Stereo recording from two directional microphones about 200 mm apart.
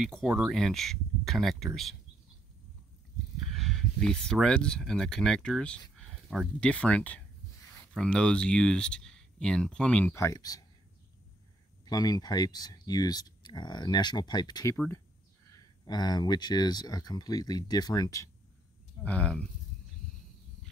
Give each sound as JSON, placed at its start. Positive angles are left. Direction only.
{"t": 0.0, "sound": "speech", "side_deg": 0}
{"t": 3.5, "sound": "speech", "side_deg": 0}
{"t": 11.8, "sound": "speech", "side_deg": 20}
{"t": 19.0, "sound": "speech", "side_deg": 5}